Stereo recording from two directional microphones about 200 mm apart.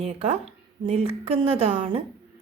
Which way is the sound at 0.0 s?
30° right (ahead or behind).